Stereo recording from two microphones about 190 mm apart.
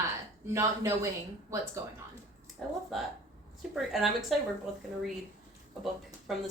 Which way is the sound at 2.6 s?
Centre (ahead or behind).